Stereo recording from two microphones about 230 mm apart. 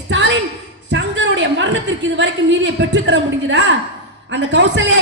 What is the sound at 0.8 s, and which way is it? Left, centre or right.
A woman's voice, right.